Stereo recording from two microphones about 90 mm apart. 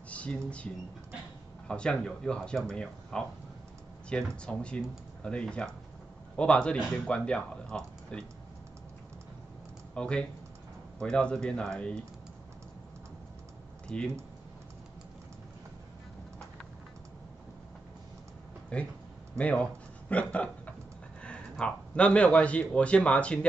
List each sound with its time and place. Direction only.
0.1 s speech: 15° left (ahead or behind)
1.7 s speech: 10° left (ahead or behind)
9.9 s speech: 10° left (ahead or behind)
13.8 s speech: 10° left (ahead or behind)
18.7 s a man's voice: 10° left (ahead or behind)